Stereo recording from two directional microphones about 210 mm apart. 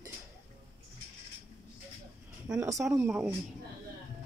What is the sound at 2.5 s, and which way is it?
Speech, 15° right (ahead or behind).